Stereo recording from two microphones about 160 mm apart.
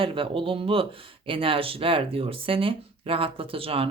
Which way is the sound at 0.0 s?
35° right (ahead or behind).